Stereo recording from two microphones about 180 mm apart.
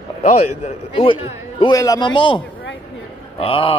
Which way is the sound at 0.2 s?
35° left (ahead or behind).